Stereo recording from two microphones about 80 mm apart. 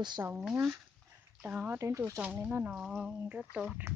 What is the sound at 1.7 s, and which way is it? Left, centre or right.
Speech, right.